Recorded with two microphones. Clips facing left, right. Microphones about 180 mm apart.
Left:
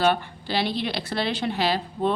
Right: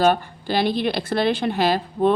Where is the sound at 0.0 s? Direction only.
45° right (ahead or behind).